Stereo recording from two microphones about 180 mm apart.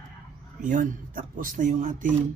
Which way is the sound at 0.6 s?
45° right (ahead or behind).